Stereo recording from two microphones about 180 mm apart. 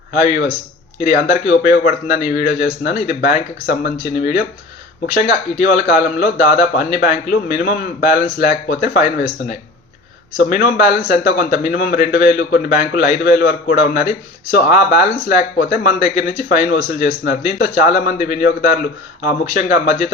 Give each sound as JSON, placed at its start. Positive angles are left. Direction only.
{"t": 0.1, "sound": "speech", "side_deg": 55}
{"t": 5.1, "sound": "speech", "side_deg": 60}